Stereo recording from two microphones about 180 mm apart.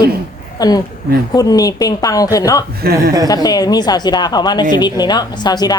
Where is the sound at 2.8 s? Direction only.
60° right (ahead or behind).